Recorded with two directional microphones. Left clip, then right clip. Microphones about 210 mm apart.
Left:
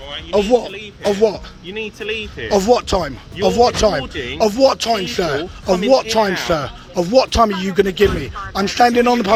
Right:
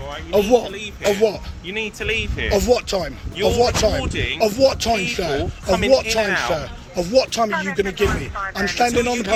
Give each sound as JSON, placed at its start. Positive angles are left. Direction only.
{"t": 0.3, "sound": "speech", "side_deg": 10}
{"t": 1.1, "sound": "speech", "side_deg": 20}
{"t": 1.6, "sound": "speech", "side_deg": 0}
{"t": 2.5, "sound": "speech", "side_deg": 25}
{"t": 4.1, "sound": "speech", "side_deg": 0}
{"t": 4.4, "sound": "speech", "side_deg": 30}